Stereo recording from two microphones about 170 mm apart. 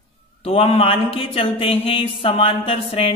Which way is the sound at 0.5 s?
35° left (ahead or behind).